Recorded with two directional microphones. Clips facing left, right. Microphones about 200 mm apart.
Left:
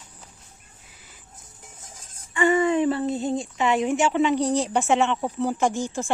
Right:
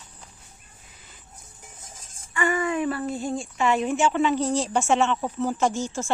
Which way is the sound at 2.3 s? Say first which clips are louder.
Left 5 dB; 25° left (ahead or behind).